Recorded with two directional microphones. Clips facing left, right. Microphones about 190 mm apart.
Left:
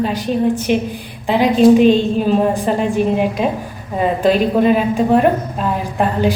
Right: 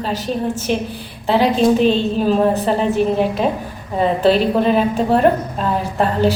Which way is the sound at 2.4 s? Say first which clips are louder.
Even; 10° left (ahead or behind).